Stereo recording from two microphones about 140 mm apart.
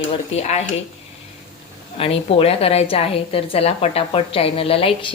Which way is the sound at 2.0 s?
45° left (ahead or behind).